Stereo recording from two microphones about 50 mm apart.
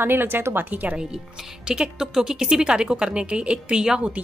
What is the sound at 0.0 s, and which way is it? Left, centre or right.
Speech, right.